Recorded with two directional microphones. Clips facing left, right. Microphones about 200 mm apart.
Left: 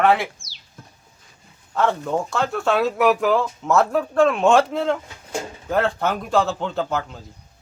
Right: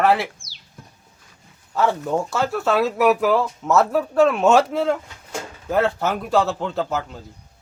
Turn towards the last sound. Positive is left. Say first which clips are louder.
# even
turn(degrees=0)  # may be behind; listen again after turning